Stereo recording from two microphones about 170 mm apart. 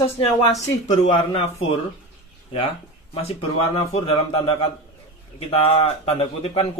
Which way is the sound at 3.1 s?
35° left (ahead or behind).